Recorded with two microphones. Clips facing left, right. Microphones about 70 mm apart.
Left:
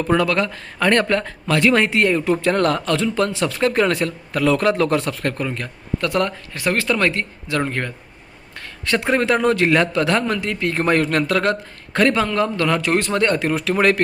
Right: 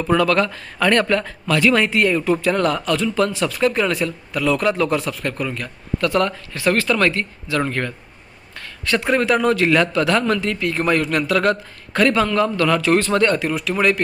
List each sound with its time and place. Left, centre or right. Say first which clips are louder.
0.1 s a man's voice: right 2 dB; centre
0.5 s speech: even; left
2.5 s a man's voice: left 2 dB; left
5.4 s a man's voice: even; left
10.7 s a man's voice: left 2 dB; left
13.4 s a man's voice: left 2 dB; left